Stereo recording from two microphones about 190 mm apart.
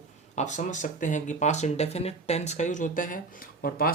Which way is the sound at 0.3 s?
40° left (ahead or behind).